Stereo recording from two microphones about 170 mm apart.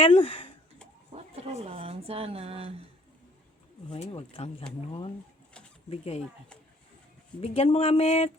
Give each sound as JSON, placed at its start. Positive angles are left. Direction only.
{"t": 0.0, "sound": "speech", "side_deg": 35}
{"t": 1.1, "sound": "speech", "side_deg": -35}
{"t": 3.8, "sound": "speech", "side_deg": 40}
{"t": 5.9, "sound": "speech", "side_deg": 40}
{"t": 7.4, "sound": "speech", "side_deg": 35}